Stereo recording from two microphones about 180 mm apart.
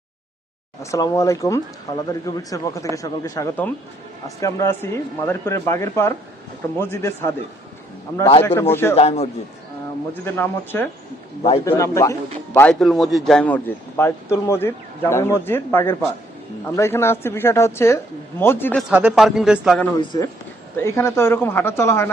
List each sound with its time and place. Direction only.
0.8 s a man's voice: 20° left (ahead or behind)
8.4 s a man's voice: 15° left (ahead or behind)
9.0 s a man's voice: 35° left (ahead or behind)
10.2 s a man's voice: 10° left (ahead or behind)
12.8 s a man's voice: centre (ahead or behind)
18.8 s a man's voice: 5° right (ahead or behind)
20.0 s a man's voice: 20° left (ahead or behind)